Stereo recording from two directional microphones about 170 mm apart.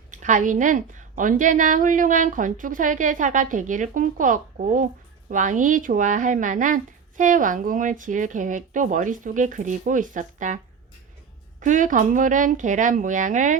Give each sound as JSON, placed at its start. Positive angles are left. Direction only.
{"t": 0.1, "sound": "speech", "side_deg": -45}
{"t": 11.6, "sound": "speech", "side_deg": -50}